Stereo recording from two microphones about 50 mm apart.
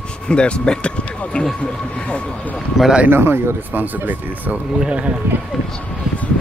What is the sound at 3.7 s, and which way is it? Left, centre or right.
Speech, right.